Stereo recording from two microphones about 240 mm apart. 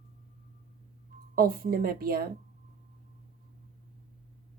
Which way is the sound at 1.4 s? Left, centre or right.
Right.